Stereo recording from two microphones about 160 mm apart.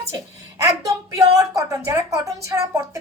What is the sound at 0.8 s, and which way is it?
Speech, 20° right (ahead or behind).